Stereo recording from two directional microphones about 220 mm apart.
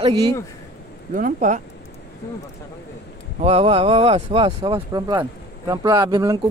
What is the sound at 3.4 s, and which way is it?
Speech, 30° right (ahead or behind).